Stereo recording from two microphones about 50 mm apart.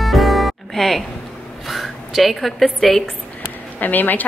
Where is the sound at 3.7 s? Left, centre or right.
Left.